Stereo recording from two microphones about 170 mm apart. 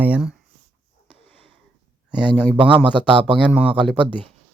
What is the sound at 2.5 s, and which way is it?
Speech, 30° right (ahead or behind).